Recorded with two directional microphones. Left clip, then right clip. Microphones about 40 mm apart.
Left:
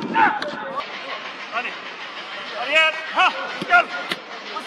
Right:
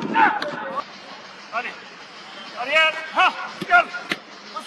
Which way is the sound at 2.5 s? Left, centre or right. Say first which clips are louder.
Left 1 dB; left.